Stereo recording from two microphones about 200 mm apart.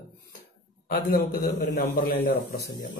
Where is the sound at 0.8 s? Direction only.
45° left (ahead or behind).